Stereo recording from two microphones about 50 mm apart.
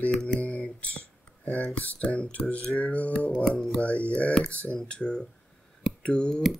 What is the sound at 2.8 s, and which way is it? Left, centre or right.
Speech, left.